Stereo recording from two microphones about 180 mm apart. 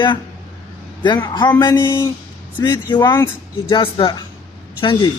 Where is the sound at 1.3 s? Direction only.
25° left (ahead or behind).